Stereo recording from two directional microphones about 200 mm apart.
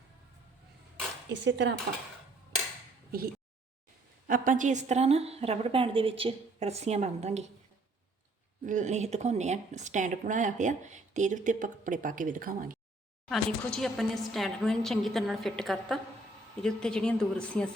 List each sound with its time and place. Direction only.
1.3 s cutlery: 60° right (ahead or behind)
3.1 s a woman's voice: 45° right (ahead or behind)
8.6 s a woman's voice: 40° right (ahead or behind)
13.2 s a woman's voice: 5° left (ahead or behind)